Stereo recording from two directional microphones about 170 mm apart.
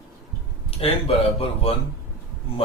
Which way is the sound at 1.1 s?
35° left (ahead or behind).